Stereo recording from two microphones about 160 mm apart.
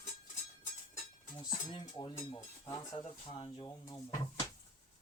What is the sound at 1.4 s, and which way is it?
Speech, 30° left (ahead or behind).